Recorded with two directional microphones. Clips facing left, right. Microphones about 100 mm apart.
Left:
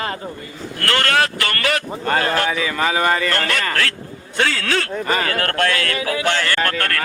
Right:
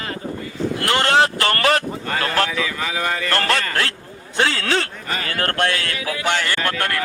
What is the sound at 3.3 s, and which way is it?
Speech, 35° right (ahead or behind).